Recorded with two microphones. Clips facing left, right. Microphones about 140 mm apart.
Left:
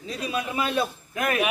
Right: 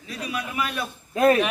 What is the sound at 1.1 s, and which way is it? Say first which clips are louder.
Speech: right 9 dB; 30° right (ahead or behind).